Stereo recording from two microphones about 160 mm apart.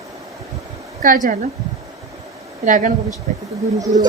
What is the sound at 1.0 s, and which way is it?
Speech, 60° right (ahead or behind).